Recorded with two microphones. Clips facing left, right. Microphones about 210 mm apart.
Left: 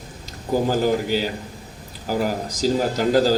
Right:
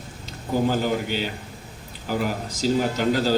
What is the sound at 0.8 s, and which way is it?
A man's voice, 40° left (ahead or behind).